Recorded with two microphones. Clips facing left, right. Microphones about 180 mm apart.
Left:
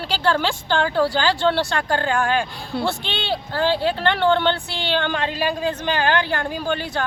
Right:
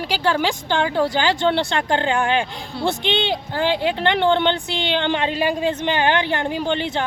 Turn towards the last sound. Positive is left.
turn(degrees=-20)  # may be behind; listen again after turning